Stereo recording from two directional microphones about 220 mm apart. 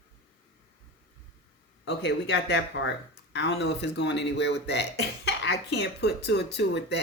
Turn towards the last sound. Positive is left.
turn(degrees=50)  # may be behind; listen again after turning